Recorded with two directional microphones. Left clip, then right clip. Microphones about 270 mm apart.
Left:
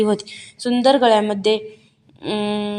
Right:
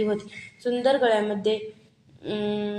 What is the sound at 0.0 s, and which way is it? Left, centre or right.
Speech, left.